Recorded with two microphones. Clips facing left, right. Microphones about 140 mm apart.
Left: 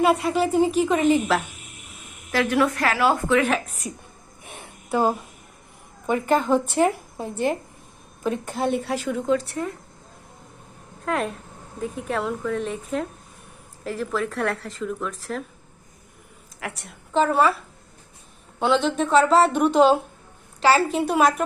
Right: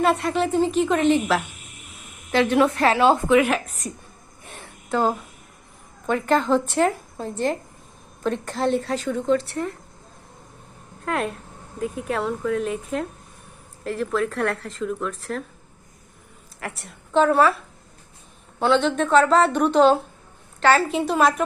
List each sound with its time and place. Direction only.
0.0 s speech: 5° left (ahead or behind)
2.3 s a woman's voice: 25° right (ahead or behind)
3.5 s speech: centre (ahead or behind)
4.5 s a sound: 15° left (ahead or behind)
6.1 s a woman's voice: 10° left (ahead or behind)
11.0 s speech: centre (ahead or behind)
16.6 s a woman's voice: centre (ahead or behind)
18.6 s speech: centre (ahead or behind)